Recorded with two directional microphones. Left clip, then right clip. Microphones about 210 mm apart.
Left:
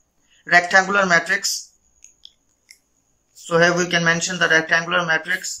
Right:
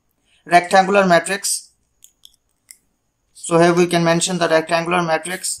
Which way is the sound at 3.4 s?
20° right (ahead or behind).